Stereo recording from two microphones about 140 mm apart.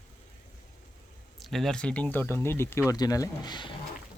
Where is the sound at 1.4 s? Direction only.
Centre (ahead or behind); by 3.8 s 35° left (ahead or behind).